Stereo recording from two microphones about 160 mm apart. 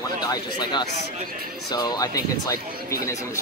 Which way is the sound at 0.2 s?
25° left (ahead or behind).